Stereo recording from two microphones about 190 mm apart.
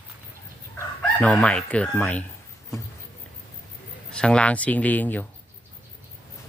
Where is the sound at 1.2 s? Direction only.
5° left (ahead or behind).